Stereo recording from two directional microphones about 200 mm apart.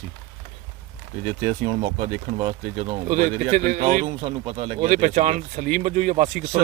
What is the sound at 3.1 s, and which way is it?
Speech, 40° right (ahead or behind).